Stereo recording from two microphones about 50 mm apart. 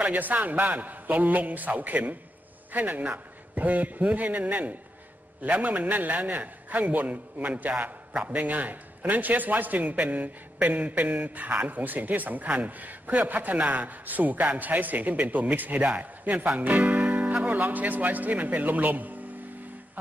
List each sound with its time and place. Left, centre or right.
0.0 s a man's voice: right
16.5 s music: right
17.5 s a man's voice: right